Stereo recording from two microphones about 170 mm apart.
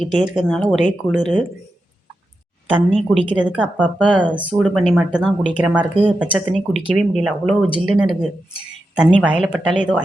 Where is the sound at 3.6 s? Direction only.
5° left (ahead or behind).